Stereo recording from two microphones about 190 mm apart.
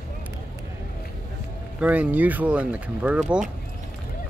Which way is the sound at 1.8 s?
5° right (ahead or behind).